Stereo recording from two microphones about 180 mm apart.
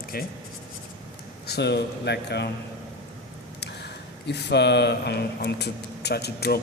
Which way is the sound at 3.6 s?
70° left (ahead or behind).